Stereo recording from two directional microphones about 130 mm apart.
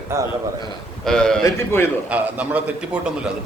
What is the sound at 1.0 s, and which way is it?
Speech, 5° left (ahead or behind).